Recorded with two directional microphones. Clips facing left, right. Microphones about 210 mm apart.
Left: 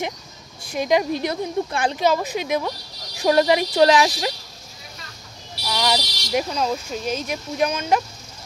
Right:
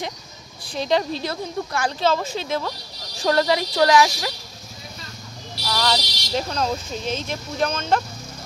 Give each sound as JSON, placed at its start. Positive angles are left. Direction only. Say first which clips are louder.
{"t": 0.7, "sound": "speech", "louder": "left 2 dB", "side_deg": 15}
{"t": 5.7, "sound": "speech", "louder": "left 1 dB", "side_deg": 15}